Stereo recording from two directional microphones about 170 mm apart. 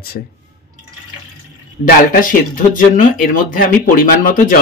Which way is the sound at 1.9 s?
55° left (ahead or behind).